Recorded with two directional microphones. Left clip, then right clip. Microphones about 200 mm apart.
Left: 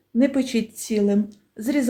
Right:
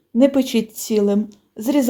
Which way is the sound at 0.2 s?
25° right (ahead or behind).